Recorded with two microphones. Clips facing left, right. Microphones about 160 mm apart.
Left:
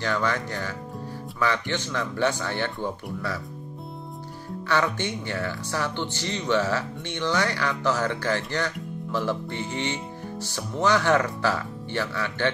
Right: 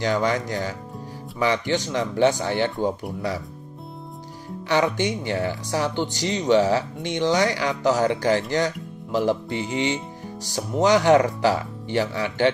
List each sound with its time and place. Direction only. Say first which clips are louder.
0.0 s speech: right 4 dB; 15° right (ahead or behind)
4.6 s speech: right 4 dB; 20° right (ahead or behind)